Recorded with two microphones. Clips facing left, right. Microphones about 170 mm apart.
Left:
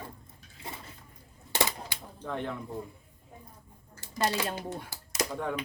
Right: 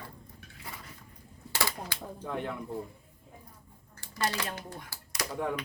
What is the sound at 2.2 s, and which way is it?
Speech, 10° right (ahead or behind).